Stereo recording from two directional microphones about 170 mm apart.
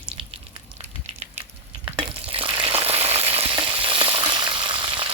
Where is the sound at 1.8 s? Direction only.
30° right (ahead or behind).